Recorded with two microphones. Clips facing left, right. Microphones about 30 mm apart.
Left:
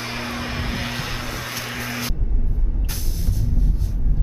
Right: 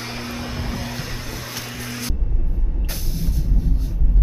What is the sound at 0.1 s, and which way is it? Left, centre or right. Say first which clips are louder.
Vehicle: left 2 dB; centre.